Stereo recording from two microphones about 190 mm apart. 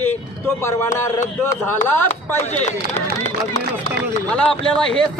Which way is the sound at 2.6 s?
35° left (ahead or behind).